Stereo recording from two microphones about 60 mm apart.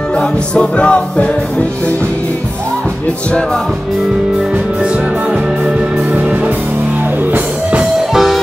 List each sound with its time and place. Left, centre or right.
0.1 s music: centre
6.1 s music: right
8.1 s music: centre